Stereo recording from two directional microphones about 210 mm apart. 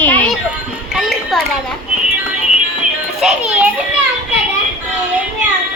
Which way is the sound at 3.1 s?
5° right (ahead or behind).